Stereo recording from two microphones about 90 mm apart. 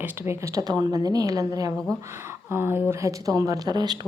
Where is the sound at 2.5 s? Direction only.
25° right (ahead or behind); by 4.0 s 50° right (ahead or behind).